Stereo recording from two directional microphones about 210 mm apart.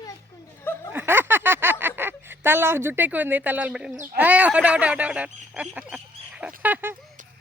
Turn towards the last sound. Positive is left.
turn(degrees=-10)  # may be behind; listen again after turning